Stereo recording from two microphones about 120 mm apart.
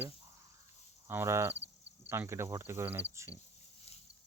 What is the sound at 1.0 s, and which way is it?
Speech, 20° right (ahead or behind).